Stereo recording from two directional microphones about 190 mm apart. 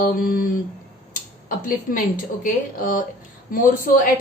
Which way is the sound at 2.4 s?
45° left (ahead or behind).